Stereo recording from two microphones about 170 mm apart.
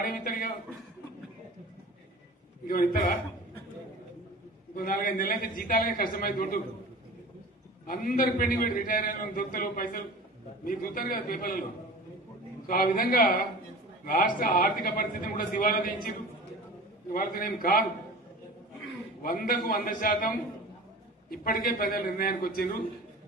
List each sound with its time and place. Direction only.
0.0 s a man's voice: 55° left (ahead or behind)
4.7 s a man's voice: 55° left (ahead or behind)
7.8 s a man's voice: 60° left (ahead or behind)
12.6 s a man's voice: 60° left (ahead or behind)
19.2 s a man's voice: 55° left (ahead or behind)